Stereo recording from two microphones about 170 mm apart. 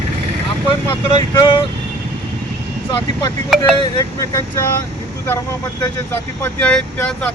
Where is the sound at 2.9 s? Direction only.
30° left (ahead or behind).